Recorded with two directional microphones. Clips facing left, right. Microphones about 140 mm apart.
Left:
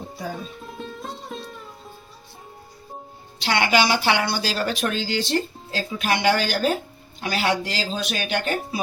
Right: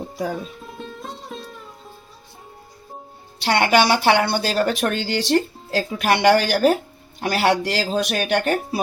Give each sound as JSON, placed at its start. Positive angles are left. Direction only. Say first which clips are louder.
{"t": 0.6, "sound": "music", "louder": "even", "side_deg": 0}
{"t": 3.4, "sound": "speech", "louder": "right 3 dB", "side_deg": -50}